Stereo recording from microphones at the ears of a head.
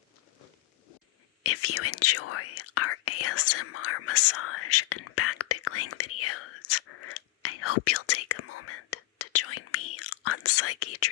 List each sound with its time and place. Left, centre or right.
1.5 s whispering: left